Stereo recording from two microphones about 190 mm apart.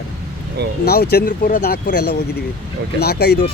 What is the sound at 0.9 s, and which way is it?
Speech, 55° left (ahead or behind).